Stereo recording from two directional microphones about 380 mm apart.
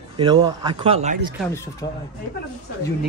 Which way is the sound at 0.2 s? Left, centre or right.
Centre.